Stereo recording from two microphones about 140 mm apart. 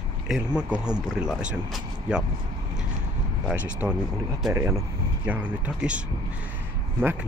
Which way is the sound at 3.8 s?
15° right (ahead or behind).